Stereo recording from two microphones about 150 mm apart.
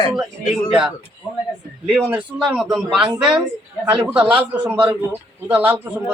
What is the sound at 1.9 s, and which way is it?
A man's voice, 5° right (ahead or behind).